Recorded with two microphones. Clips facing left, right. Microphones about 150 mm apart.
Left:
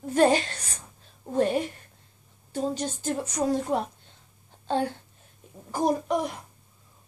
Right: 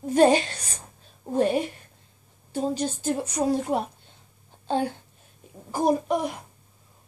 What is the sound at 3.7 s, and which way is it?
Speech, 15° right (ahead or behind).